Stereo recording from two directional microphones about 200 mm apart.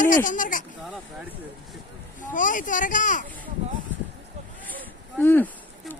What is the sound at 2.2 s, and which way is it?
Speech, 40° left (ahead or behind).